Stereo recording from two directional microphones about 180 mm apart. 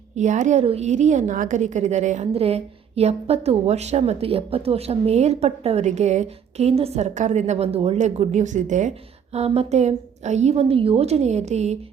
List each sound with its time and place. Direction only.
0.2 s a woman's voice: 40° right (ahead or behind)